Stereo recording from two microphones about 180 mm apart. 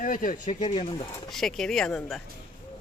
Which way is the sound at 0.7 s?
35° left (ahead or behind).